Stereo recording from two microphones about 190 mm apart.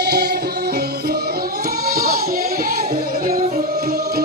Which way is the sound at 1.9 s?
50° right (ahead or behind).